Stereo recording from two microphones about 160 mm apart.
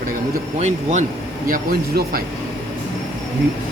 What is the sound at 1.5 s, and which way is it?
Speech, 65° right (ahead or behind).